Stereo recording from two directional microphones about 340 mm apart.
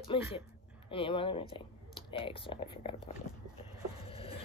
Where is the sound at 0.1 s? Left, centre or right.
Centre.